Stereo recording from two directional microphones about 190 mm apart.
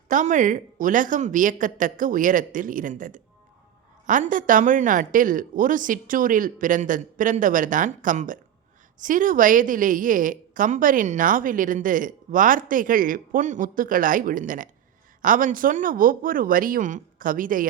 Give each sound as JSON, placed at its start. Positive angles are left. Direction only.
{"t": 0.1, "sound": "a woman's voice", "side_deg": -40}